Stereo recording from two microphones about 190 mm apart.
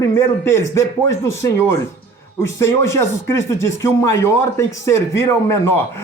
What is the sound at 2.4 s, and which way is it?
Speech, 15° left (ahead or behind).